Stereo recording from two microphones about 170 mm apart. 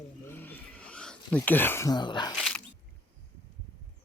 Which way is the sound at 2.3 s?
Centre (ahead or behind).